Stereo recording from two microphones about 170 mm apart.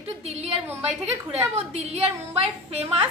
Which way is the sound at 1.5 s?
35° right (ahead or behind).